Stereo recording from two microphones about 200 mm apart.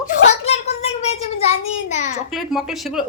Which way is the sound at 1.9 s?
35° left (ahead or behind).